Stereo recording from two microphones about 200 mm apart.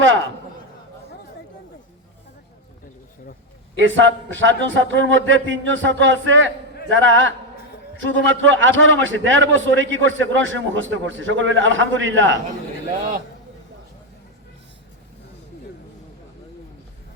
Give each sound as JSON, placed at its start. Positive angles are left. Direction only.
{"t": 0.0, "sound": "a man's voice", "side_deg": -75}
{"t": 3.8, "sound": "a man's voice", "side_deg": -70}